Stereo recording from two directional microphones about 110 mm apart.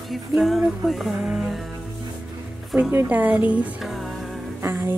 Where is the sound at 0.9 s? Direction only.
Centre (ahead or behind).